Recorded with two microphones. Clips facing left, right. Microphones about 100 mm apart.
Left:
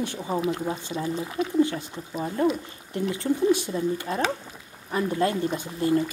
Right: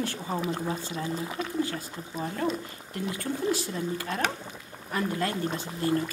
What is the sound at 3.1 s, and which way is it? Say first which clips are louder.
Speech: left 7 dB; 25° left (ahead or behind).